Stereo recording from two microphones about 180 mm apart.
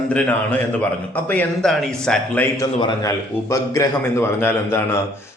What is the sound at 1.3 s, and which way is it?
A man's voice, 5° left (ahead or behind).